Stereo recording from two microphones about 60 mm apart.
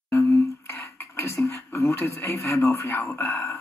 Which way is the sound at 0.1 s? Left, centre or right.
Left.